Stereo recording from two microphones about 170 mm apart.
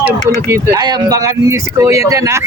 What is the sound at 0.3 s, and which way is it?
Speech, 15° right (ahead or behind).